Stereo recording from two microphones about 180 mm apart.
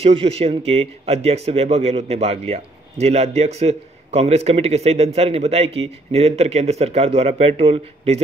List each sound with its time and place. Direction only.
0.0 s speech: 30° right (ahead or behind)